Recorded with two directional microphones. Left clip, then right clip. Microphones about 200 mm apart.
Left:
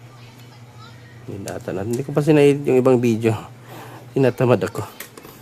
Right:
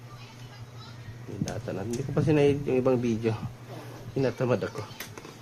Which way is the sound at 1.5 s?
30° left (ahead or behind).